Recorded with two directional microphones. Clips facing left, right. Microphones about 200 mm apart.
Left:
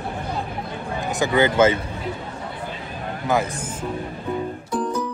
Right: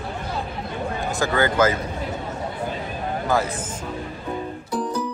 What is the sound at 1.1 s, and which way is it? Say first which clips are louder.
Speech: left 3 dB; 20° left (ahead or behind).